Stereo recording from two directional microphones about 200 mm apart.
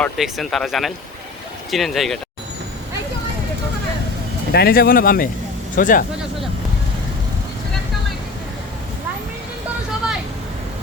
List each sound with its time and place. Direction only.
0.0 s speech: centre (ahead or behind)
4.5 s speech: 50° left (ahead or behind)